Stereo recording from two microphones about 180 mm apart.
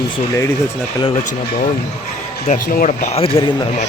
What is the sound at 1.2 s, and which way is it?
Speech, 45° left (ahead or behind).